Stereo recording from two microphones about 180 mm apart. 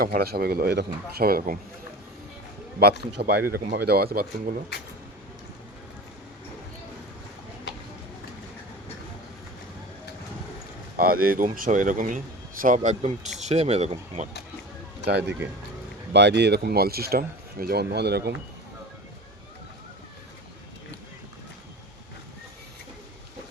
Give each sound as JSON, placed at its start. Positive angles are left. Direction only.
{"t": 0.0, "sound": "speech", "side_deg": -60}
{"t": 3.2, "sound": "speech", "side_deg": -60}
{"t": 10.9, "sound": "speech", "side_deg": -55}
{"t": 15.0, "sound": "speech", "side_deg": -65}